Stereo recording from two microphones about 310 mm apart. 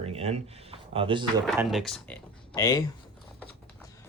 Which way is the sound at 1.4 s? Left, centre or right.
Centre.